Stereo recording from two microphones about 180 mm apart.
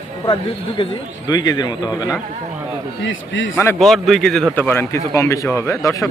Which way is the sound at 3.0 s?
90° left.